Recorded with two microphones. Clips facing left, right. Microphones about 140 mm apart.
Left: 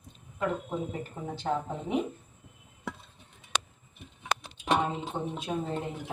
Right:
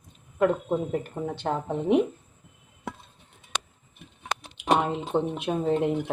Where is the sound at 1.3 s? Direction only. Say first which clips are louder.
Right 1 dB; 65° right (ahead or behind).